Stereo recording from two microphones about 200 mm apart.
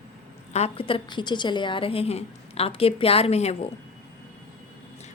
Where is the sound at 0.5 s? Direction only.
30° left (ahead or behind).